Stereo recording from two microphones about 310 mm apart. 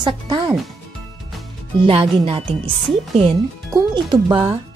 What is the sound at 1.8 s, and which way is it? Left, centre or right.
Speech, centre.